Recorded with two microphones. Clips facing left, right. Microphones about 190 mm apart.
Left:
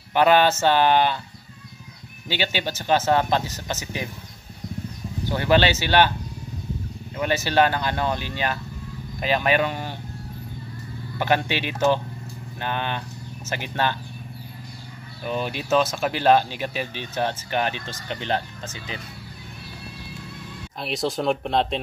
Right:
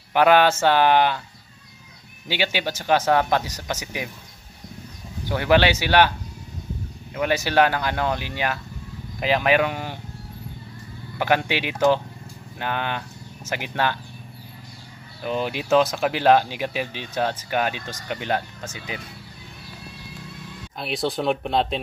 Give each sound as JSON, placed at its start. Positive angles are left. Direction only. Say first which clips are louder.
{"t": 0.1, "sound": "speech", "louder": "right 1 dB", "side_deg": -10}
{"t": 2.2, "sound": "speech", "louder": "right 1 dB", "side_deg": -10}
{"t": 5.4, "sound": "speech", "louder": "right 1 dB", "side_deg": -10}
{"t": 7.2, "sound": "speech", "louder": "right 1 dB", "side_deg": -10}
{"t": 11.1, "sound": "speech", "louder": "right 1 dB", "side_deg": -10}
{"t": 15.2, "sound": "speech", "louder": "right 2 dB", "side_deg": -15}
{"t": 20.8, "sound": "speech", "louder": "even", "side_deg": 0}